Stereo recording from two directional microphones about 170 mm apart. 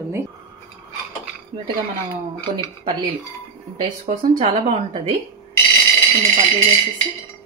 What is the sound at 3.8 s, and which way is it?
A woman's voice, 35° right (ahead or behind).